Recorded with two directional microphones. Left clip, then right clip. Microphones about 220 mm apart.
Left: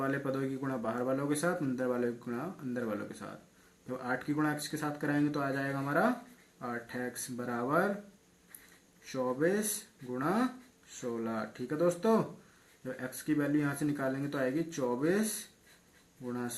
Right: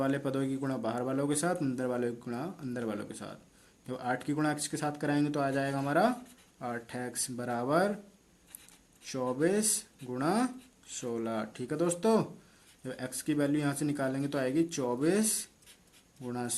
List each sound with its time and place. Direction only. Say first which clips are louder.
0.0 s a man's voice: right 2 dB; 45° right (ahead or behind)
9.1 s a man's voice: right 1 dB; 45° right (ahead or behind)
16.2 s a man's voice: right 1 dB; 50° right (ahead or behind)